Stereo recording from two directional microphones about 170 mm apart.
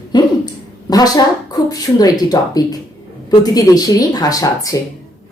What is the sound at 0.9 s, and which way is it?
Speech, 25° left (ahead or behind).